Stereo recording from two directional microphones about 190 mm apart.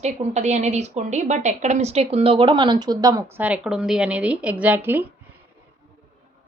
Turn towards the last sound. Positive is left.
turn(degrees=-10)  # may be behind; listen again after turning